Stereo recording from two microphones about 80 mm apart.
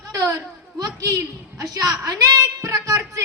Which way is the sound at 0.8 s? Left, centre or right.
Right.